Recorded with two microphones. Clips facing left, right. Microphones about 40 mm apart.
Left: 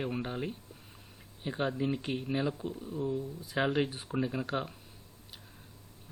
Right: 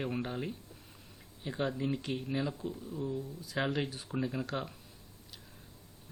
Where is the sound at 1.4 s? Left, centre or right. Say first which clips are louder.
Left 2 dB; left.